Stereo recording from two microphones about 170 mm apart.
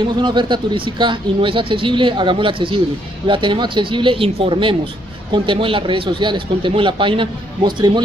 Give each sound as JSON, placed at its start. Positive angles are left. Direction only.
{"t": 0.0, "sound": "speech", "side_deg": -30}